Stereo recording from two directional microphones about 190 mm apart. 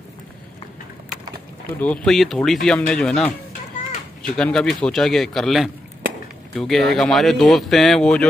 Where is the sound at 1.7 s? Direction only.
10° left (ahead or behind).